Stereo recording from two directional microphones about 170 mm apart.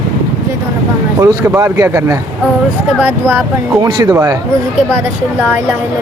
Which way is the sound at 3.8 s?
20° right (ahead or behind).